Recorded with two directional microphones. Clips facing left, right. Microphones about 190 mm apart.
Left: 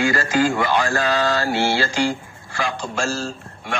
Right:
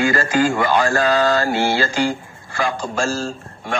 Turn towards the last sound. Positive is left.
turn(degrees=-45)  # may be behind; listen again after turning